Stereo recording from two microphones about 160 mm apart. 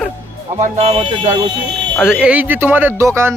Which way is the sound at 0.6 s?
40° right (ahead or behind).